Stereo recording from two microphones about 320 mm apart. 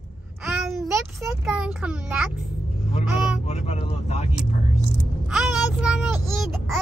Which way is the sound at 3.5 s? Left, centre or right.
Centre.